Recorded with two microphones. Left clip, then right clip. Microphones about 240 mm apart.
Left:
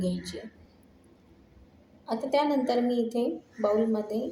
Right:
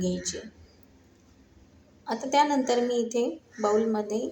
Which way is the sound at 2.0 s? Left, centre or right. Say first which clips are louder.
Right 3 dB; right.